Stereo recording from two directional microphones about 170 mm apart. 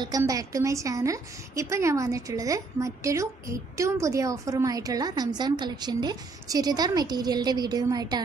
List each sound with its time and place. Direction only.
0.2 s a woman's voice: 20° right (ahead or behind)